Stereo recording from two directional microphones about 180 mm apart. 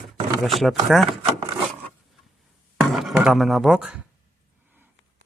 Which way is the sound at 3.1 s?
Centre (ahead or behind).